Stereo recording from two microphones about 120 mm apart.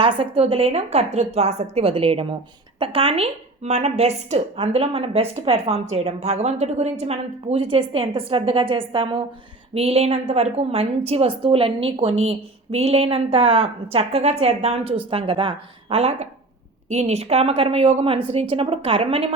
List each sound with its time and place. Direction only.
0.0 s a woman's voice: 50° right (ahead or behind)
9.7 s a woman's voice: 55° right (ahead or behind)